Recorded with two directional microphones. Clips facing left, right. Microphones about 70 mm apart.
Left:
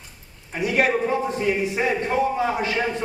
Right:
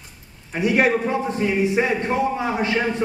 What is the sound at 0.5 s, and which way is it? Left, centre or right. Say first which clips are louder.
A man's voice: right 2 dB; right.